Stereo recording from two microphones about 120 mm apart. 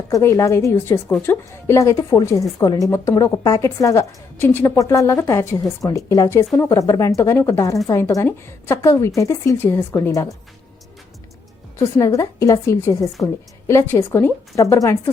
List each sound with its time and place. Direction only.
0.1 s a woman's voice: 25° left (ahead or behind)
11.8 s a woman's voice: 30° left (ahead or behind)